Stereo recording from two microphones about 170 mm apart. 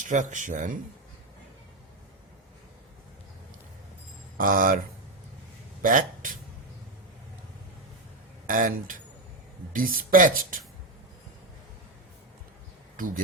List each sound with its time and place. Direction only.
0.0 s speech: 45° right (ahead or behind)
4.4 s speech: 55° right (ahead or behind)
5.8 s speech: 50° right (ahead or behind)
8.4 s speech: 55° right (ahead or behind)
13.0 s speech: 55° right (ahead or behind)